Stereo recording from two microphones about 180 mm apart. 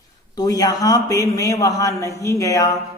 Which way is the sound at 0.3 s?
20° left (ahead or behind).